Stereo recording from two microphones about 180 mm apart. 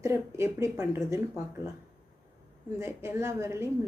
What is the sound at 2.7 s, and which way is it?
Speech, 15° right (ahead or behind).